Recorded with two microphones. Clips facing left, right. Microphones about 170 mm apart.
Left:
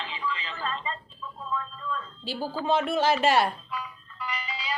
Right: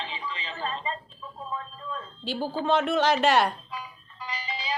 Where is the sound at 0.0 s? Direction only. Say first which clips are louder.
Left 2 dB; 30° right (ahead or behind).